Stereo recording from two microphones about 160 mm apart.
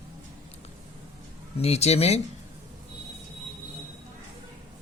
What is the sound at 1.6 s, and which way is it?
Speech, 40° left (ahead or behind).